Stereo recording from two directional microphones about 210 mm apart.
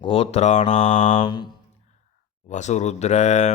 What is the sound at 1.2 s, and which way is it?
Speech, 20° left (ahead or behind).